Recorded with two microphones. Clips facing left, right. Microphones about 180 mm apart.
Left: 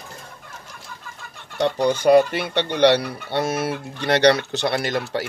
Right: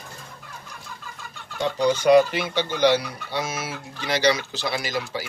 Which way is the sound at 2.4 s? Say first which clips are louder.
Left 3 dB; 65° left (ahead or behind).